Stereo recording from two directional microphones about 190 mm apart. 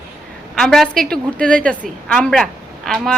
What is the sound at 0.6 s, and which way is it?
A woman's voice, 5° left (ahead or behind).